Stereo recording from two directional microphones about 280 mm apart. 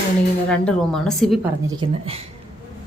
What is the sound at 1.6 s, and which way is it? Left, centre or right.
Speech, centre.